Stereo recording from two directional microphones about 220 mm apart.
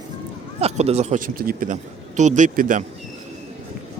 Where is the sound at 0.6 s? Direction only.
30° right (ahead or behind).